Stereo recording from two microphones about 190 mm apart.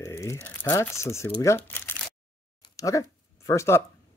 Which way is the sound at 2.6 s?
15° left (ahead or behind).